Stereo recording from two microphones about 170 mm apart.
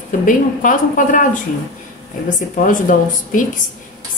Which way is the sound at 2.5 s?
50° left (ahead or behind).